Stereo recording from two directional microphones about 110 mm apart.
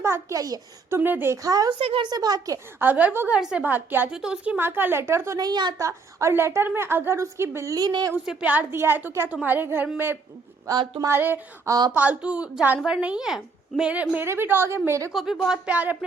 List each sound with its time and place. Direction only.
0.0 s a child's voice: 25° right (ahead or behind)
0.9 s a woman's voice: 20° right (ahead or behind)
1.4 s speech: 35° right (ahead or behind)
1.8 s speech: 55° right (ahead or behind)
2.0 s speech: 35° right (ahead or behind)
2.7 s a woman's voice: 15° right (ahead or behind)
5.4 s speech: 40° right (ahead or behind)
5.8 s a woman's voice: 25° right (ahead or behind)
8.2 s a woman's voice: 10° right (ahead or behind)
10.7 s speech: 40° right (ahead or behind)
11.1 s a woman's voice: 20° right (ahead or behind)
15.1 s speech: centre (ahead or behind)